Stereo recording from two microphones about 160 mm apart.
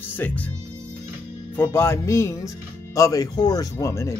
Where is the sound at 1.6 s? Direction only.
15° left (ahead or behind).